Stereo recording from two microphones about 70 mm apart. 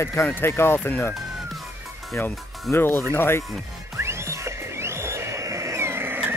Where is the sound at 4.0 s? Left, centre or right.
Right.